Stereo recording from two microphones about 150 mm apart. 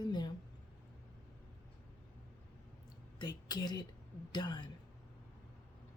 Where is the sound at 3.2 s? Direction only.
30° left (ahead or behind).